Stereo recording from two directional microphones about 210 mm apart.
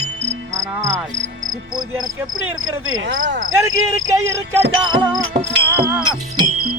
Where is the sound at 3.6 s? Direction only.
15° right (ahead or behind).